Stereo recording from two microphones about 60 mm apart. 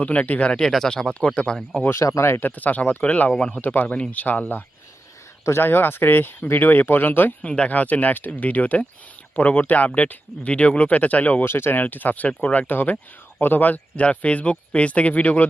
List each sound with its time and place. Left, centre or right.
0.0 s speech: left
0.6 s speech: centre
2.2 s speech: left
2.6 s speech: left
5.5 s speech: left
7.4 s speech: centre
11.4 s speech: left